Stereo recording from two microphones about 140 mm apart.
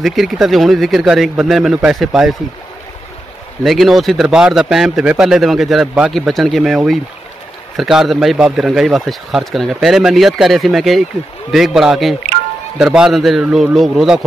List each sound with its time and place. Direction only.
0.0 s a man's voice: centre (ahead or behind)
3.6 s a man's voice: centre (ahead or behind)